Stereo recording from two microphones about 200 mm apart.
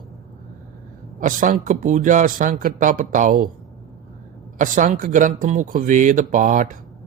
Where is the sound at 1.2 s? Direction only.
40° right (ahead or behind).